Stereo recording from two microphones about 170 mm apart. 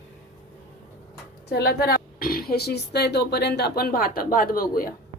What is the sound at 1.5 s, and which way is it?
Speech, 65° left (ahead or behind).